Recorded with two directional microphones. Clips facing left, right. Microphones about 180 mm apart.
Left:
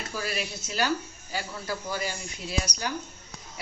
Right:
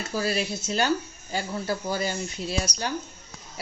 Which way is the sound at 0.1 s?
30° right (ahead or behind).